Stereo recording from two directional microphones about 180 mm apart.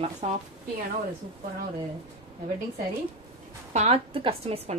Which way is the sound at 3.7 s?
35° right (ahead or behind).